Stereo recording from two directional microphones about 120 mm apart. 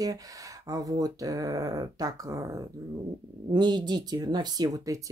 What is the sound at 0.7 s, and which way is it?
Speech, 30° right (ahead or behind).